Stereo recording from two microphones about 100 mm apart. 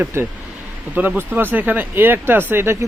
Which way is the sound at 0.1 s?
25° right (ahead or behind).